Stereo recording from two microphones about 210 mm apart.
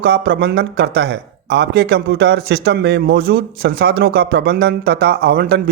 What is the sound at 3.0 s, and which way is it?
Speech, 45° right (ahead or behind).